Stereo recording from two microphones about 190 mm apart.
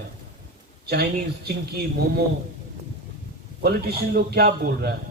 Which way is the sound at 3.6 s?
55° right (ahead or behind).